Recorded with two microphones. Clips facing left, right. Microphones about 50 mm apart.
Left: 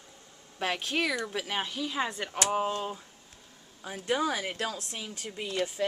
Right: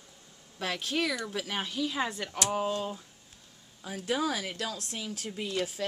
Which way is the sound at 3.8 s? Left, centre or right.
Centre.